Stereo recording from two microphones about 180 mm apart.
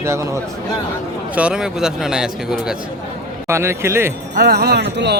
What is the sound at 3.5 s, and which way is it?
Speech, 15° right (ahead or behind).